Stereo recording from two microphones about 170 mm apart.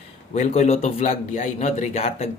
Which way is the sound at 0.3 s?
40° left (ahead or behind).